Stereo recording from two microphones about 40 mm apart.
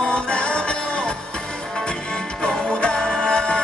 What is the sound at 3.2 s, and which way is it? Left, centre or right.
Music, left.